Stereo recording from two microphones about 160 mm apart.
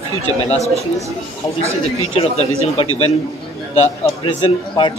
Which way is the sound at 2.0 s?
40° left (ahead or behind).